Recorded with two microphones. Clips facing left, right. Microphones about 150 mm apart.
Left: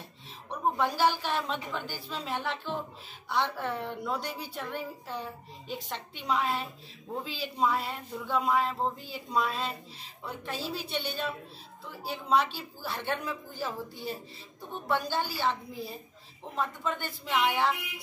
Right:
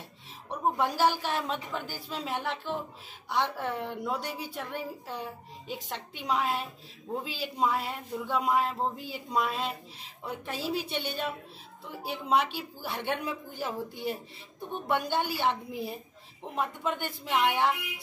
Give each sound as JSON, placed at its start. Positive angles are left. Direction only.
{"t": 0.7, "sound": "speech", "side_deg": -10}